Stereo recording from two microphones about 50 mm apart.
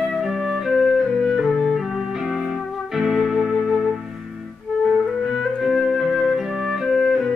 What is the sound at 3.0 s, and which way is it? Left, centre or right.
Music, centre.